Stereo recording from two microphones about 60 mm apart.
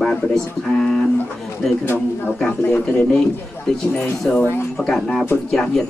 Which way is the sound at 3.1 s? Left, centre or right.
Centre.